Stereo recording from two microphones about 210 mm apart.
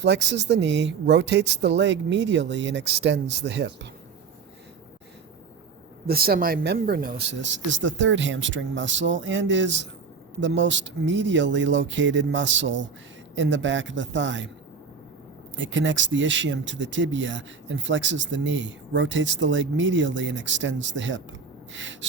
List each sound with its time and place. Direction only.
0.0 s speech: 55° right (ahead or behind)
6.1 s speech: 45° right (ahead or behind)
7.3 s speech: 60° right (ahead or behind)
15.5 s speech: 60° right (ahead or behind)